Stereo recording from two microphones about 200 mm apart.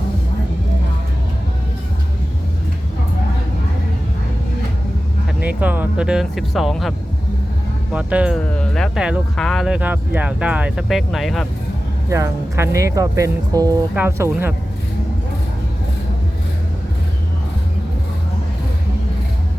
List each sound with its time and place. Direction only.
5.4 s speech: 5° right (ahead or behind)
7.9 s speech: 5° right (ahead or behind)
12.0 s speech: 15° right (ahead or behind)